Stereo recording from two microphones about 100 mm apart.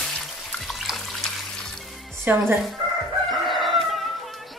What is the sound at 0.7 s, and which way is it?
Water tap, centre (ahead or behind).